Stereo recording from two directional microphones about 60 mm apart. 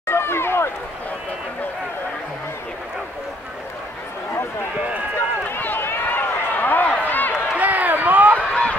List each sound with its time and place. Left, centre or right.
0.1 s run: left
5.5 s run: left
7.5 s run: right
8.4 s run: centre